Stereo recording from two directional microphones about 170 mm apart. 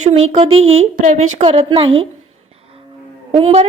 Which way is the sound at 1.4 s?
30° right (ahead or behind).